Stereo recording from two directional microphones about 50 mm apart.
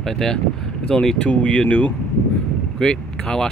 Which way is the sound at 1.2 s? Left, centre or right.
Left.